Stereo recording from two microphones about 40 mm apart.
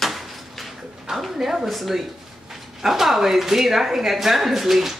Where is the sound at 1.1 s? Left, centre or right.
Centre.